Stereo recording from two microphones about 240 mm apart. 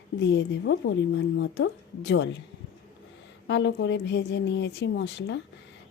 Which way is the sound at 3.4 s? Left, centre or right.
Left.